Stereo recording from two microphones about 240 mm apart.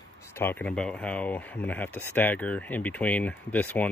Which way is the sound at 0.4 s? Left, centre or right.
Centre.